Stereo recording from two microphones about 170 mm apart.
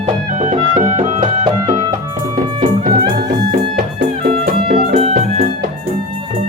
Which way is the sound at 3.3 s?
60° right (ahead or behind).